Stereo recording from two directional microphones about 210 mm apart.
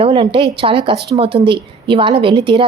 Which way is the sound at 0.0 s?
25° right (ahead or behind).